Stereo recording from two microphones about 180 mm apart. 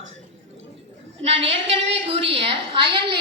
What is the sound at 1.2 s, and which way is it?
A woman's voice, 35° right (ahead or behind).